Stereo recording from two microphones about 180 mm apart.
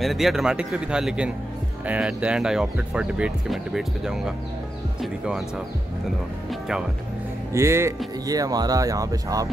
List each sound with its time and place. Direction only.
0.0 s speech: centre (ahead or behind)
7.5 s speech: 15° right (ahead or behind)